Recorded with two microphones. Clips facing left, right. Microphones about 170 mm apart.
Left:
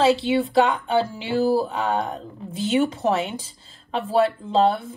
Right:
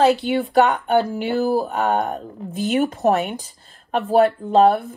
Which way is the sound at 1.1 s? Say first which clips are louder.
Right 1 dB; 50° right (ahead or behind).